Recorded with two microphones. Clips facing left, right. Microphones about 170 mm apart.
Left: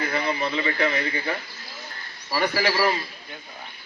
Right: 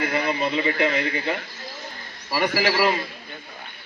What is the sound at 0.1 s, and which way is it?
A man's voice, 20° right (ahead or behind).